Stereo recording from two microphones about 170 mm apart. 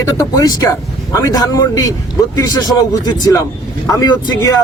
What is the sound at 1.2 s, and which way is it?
Speech, 20° left (ahead or behind).